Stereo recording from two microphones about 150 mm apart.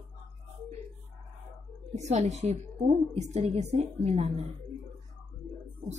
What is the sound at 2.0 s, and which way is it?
A woman's voice, 50° right (ahead or behind).